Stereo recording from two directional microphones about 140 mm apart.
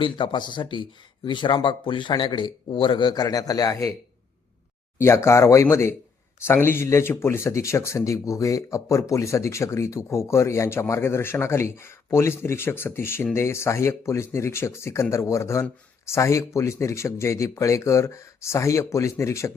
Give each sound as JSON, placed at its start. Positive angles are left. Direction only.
{"t": 0.0, "sound": "speech", "side_deg": 35}
{"t": 4.9, "sound": "speech", "side_deg": 20}